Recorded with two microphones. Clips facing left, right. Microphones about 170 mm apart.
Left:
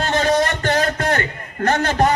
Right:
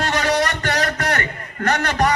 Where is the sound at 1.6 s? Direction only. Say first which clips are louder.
Left 2 dB; 30° left (ahead or behind).